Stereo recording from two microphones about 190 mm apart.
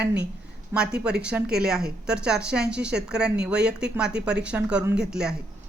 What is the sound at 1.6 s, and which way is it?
Speech, 5° right (ahead or behind).